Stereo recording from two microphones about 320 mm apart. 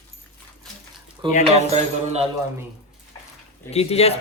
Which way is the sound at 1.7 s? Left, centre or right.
Centre.